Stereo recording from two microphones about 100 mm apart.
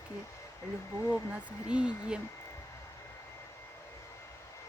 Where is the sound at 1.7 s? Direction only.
10° right (ahead or behind).